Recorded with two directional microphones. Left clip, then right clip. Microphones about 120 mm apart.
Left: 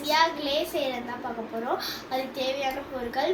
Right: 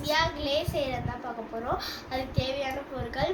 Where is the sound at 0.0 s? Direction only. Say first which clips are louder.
Left 3 dB; 5° right (ahead or behind).